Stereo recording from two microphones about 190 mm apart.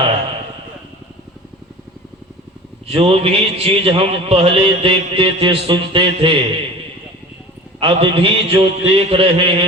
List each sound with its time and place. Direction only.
2.8 s a man's voice: 30° right (ahead or behind)
7.8 s a man's voice: 30° right (ahead or behind)